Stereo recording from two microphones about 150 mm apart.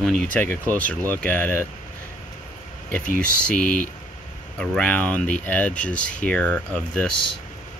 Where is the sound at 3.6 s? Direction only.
65° left (ahead or behind).